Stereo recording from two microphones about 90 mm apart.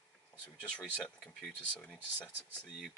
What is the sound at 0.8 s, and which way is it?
Speech, 10° left (ahead or behind).